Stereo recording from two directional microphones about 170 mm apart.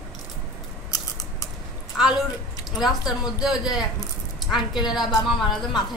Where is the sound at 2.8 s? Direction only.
5° right (ahead or behind).